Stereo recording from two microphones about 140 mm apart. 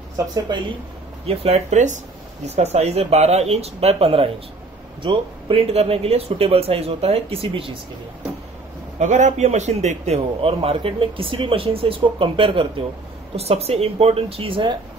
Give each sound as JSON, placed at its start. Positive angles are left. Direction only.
{"t": 1.2, "sound": "a man's voice", "side_deg": -45}
{"t": 9.0, "sound": "a man's voice", "side_deg": -60}